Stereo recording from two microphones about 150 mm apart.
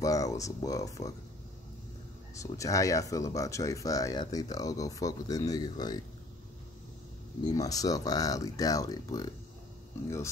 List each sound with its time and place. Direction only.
0.0 s speech: 20° left (ahead or behind)
2.4 s speech: 20° left (ahead or behind)
7.5 s speech: 25° left (ahead or behind)